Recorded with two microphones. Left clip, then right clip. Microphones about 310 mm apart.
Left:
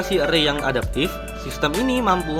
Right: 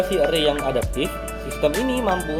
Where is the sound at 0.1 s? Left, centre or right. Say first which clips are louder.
Left 5 dB; left.